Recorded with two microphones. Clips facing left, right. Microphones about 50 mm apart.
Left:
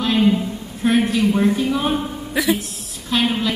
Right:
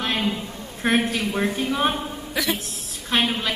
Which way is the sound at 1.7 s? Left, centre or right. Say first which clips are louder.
Left 2 dB; right.